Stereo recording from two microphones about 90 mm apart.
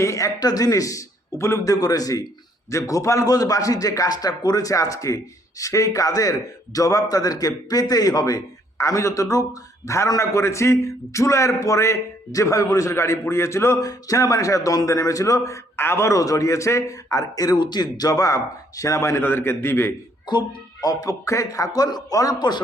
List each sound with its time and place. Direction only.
0.0 s a man's voice: 35° left (ahead or behind)
20.2 s a man's voice: 55° left (ahead or behind)